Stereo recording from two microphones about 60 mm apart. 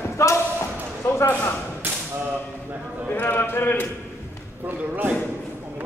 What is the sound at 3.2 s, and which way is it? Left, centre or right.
Speech, left.